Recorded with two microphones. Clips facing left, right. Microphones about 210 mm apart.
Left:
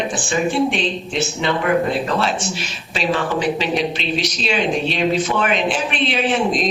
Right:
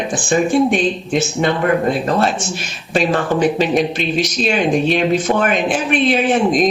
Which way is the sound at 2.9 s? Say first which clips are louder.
Right 4 dB; 50° right (ahead or behind).